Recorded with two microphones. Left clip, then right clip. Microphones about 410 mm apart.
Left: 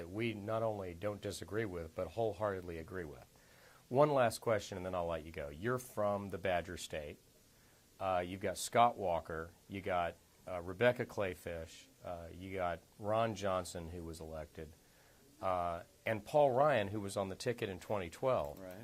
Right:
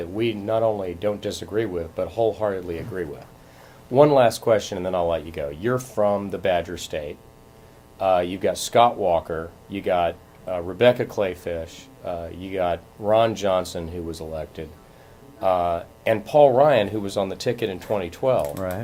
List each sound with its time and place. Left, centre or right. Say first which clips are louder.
0.2 s speech: right 16 dB; left